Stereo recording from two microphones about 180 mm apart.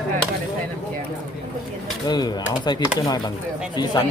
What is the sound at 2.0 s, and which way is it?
Speech, 25° left (ahead or behind).